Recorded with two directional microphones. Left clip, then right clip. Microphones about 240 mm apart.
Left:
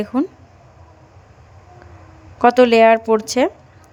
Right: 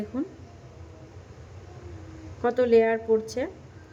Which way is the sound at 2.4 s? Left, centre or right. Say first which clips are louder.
Left 10 dB; left.